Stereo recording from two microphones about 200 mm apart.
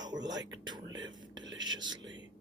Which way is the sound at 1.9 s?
65° right (ahead or behind).